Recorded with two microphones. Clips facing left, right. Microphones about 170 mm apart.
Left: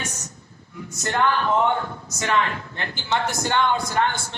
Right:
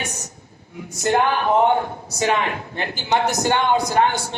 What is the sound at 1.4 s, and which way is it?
Speech, 60° right (ahead or behind).